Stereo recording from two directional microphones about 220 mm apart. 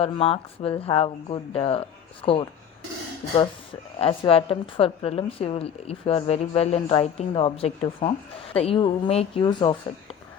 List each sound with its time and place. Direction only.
0.0 s a woman's voice: 25° left (ahead or behind)